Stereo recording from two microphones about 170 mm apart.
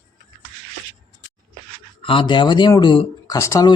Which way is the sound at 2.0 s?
30° left (ahead or behind).